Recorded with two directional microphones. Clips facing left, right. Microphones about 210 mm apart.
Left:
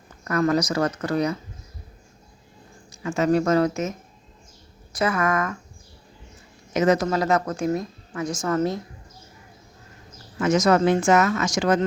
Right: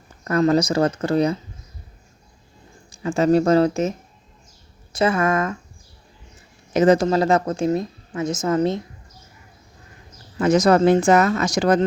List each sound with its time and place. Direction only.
0.3 s a woman's voice: 30° right (ahead or behind)
2.9 s a woman's voice: 30° right (ahead or behind)
6.7 s a woman's voice: 30° right (ahead or behind)
10.3 s speech: 35° right (ahead or behind)